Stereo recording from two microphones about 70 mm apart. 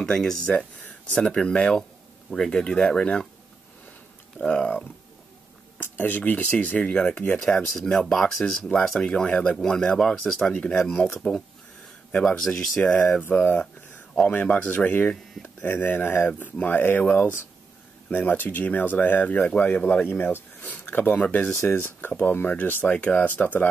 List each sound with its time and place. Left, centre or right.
0.0 s speech: centre
4.4 s speech: centre
5.8 s speech: left
6.9 s speech: centre
10.5 s speech: centre
12.3 s speech: centre
13.2 s speech: left